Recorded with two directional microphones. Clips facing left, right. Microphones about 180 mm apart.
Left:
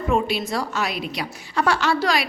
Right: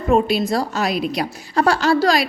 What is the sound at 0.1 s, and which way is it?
A woman's voice, 35° right (ahead or behind).